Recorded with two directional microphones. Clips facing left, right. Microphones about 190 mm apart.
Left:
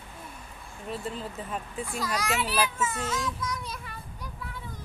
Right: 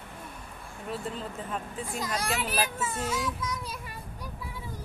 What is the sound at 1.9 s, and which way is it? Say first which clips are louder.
Speech: left 1 dB; 20° right (ahead or behind).